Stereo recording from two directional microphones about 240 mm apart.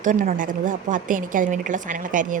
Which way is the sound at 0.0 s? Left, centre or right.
Right.